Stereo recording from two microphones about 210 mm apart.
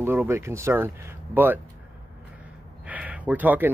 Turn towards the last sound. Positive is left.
turn(degrees=-10)  # may be behind; listen again after turning